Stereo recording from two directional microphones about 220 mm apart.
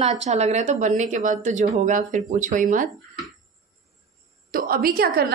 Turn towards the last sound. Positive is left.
turn(degrees=-45)  # may be behind; listen again after turning